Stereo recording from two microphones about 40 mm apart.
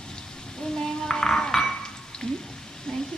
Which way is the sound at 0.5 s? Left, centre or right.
Centre.